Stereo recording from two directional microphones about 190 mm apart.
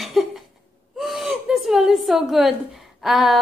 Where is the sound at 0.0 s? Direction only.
Centre (ahead or behind).